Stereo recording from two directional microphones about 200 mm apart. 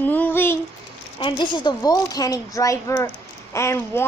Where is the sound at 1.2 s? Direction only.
25° left (ahead or behind).